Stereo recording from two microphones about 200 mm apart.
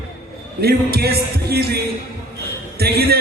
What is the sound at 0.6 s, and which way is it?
A man's voice, 50° right (ahead or behind).